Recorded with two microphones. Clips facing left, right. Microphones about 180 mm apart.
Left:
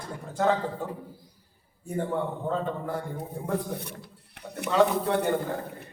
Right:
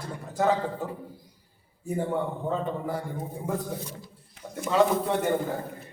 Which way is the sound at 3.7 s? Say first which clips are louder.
Even; 65° left (ahead or behind).